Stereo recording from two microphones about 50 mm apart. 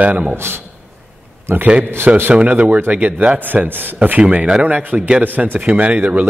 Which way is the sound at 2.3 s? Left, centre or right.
Right.